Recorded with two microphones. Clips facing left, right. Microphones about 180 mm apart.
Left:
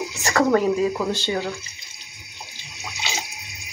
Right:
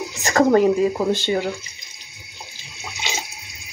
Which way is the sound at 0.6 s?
20° right (ahead or behind).